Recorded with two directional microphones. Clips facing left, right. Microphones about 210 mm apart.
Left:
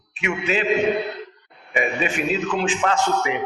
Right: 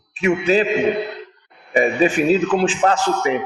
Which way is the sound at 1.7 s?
35° right (ahead or behind).